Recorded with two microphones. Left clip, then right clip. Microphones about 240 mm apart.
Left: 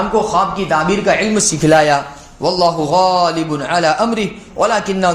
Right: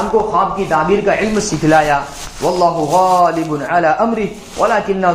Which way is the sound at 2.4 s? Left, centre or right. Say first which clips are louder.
Even; left.